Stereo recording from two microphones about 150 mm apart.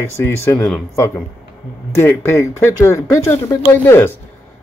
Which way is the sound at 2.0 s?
15° left (ahead or behind).